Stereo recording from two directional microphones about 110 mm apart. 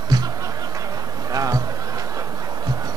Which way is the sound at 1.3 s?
35° right (ahead or behind).